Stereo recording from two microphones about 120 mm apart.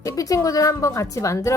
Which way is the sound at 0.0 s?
30° left (ahead or behind).